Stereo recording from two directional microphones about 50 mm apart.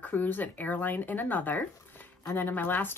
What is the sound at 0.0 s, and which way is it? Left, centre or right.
Speech, left.